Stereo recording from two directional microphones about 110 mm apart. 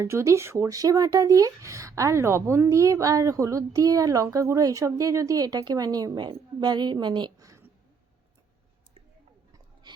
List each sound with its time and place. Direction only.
0.0 s speech: 25° right (ahead or behind); by 7.4 s 45° right (ahead or behind)